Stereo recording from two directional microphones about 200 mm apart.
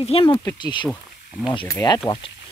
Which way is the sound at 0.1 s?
25° left (ahead or behind).